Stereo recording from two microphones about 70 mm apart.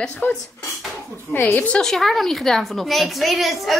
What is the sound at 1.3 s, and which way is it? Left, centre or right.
Speech, left.